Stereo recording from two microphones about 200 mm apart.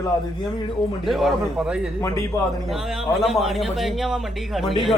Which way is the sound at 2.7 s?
Centre (ahead or behind).